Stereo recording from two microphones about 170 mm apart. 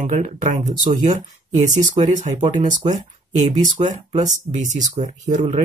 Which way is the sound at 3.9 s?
45° right (ahead or behind).